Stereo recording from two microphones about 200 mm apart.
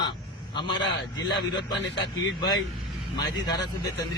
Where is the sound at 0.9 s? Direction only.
60° left (ahead or behind).